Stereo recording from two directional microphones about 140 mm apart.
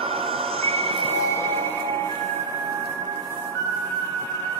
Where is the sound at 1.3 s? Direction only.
20° left (ahead or behind).